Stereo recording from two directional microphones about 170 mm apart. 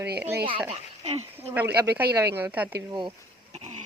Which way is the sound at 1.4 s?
10° right (ahead or behind).